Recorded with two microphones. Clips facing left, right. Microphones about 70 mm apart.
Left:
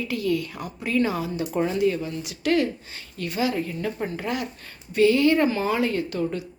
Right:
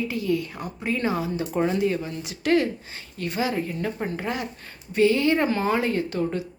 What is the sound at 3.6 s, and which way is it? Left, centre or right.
Speech, centre.